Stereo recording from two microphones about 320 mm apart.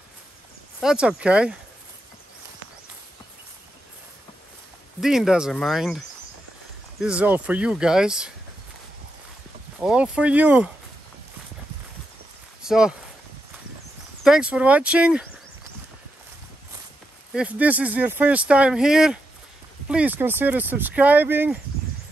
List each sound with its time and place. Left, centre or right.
0.7 s speech: centre
5.0 s speech: centre
9.8 s speech: centre
12.6 s speech: centre
14.2 s speech: centre
17.3 s speech: centre